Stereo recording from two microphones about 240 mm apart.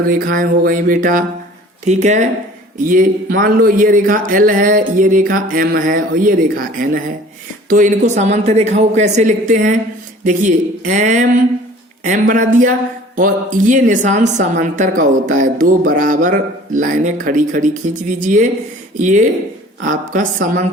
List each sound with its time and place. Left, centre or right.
0.1 s a woman's voice: right